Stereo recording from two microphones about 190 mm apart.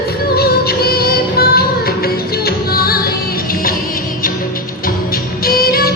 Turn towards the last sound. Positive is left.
turn(degrees=50)  # may be behind; listen again after turning